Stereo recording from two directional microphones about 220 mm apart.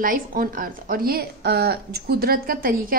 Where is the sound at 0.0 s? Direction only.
40° right (ahead or behind).